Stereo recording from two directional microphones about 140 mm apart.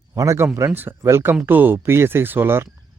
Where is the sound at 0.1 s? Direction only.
20° right (ahead or behind).